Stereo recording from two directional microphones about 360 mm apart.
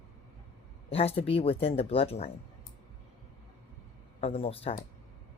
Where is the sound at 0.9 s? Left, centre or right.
Centre.